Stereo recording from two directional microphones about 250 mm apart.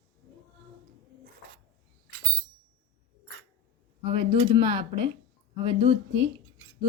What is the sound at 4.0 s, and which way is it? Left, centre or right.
Speech, right.